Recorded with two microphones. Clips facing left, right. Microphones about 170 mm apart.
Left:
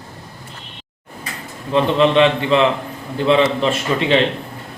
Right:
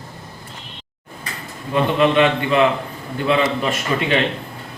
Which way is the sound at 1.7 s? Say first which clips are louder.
Left 2 dB; 25° left (ahead or behind).